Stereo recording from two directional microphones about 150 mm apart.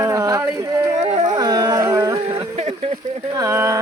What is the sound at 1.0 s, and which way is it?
Music, 45° right (ahead or behind).